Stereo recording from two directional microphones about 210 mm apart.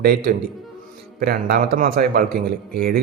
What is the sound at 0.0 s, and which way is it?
A man's voice, 45° right (ahead or behind).